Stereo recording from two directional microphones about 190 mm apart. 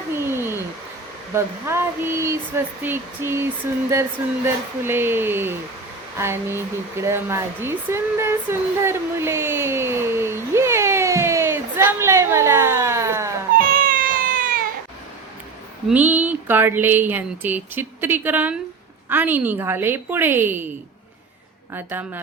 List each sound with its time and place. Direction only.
0.1 s a sound: 15° right (ahead or behind)
1.3 s speech: 15° right (ahead or behind)
6.1 s hair dryer: 15° right (ahead or behind)
13.6 s a sound: 50° right (ahead or behind)
15.9 s speech: 10° right (ahead or behind)
21.7 s speech: 10° right (ahead or behind)